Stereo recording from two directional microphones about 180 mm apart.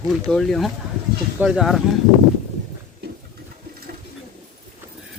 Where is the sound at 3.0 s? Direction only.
65° right (ahead or behind).